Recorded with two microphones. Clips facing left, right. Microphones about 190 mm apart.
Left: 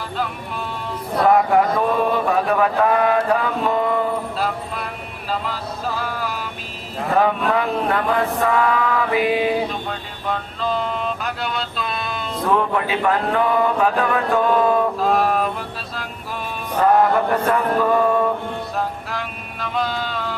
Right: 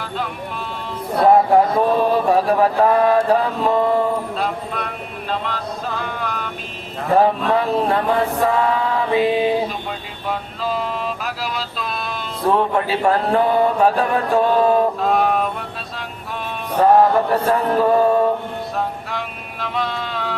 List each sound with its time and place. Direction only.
1.3 s mantra: 30° right (ahead or behind)
4.4 s a sound: centre (ahead or behind)
5.3 s vehicle: 5° left (ahead or behind)
7.2 s chant: 35° right (ahead or behind)
10.2 s a sound: 5° right (ahead or behind)
12.5 s mantra: 35° right (ahead or behind)
15.0 s mantra: centre (ahead or behind)
17.3 s mantra: 30° right (ahead or behind)
18.8 s music: centre (ahead or behind)